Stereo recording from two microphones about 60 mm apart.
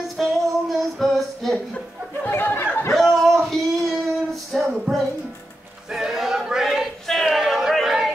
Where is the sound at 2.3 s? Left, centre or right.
Left.